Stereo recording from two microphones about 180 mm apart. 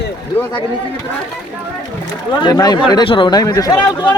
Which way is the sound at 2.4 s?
20° left (ahead or behind).